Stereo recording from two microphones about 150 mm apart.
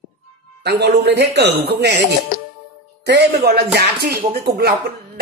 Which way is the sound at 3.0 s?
90° right.